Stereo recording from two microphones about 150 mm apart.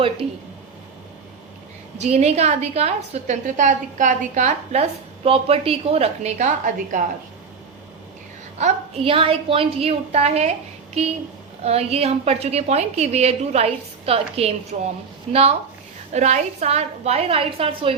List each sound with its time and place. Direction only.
0.2 s speech: 5° left (ahead or behind)
2.0 s a woman's voice: 45° right (ahead or behind)
6.7 s a woman's voice: 60° right (ahead or behind)
8.5 s a woman's voice: 40° right (ahead or behind)